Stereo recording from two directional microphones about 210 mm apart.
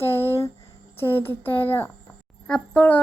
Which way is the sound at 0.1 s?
10° left (ahead or behind).